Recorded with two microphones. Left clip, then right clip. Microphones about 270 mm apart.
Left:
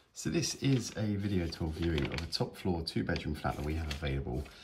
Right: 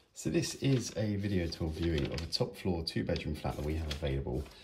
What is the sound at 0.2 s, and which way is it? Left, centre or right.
Speech, centre.